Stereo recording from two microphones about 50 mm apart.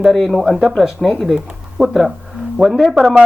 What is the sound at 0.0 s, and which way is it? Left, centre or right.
Speech, centre.